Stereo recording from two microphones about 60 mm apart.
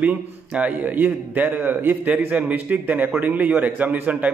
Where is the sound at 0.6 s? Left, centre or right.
Right.